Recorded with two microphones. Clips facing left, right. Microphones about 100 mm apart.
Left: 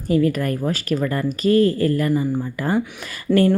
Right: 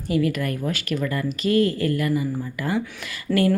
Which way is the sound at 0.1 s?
35° left (ahead or behind).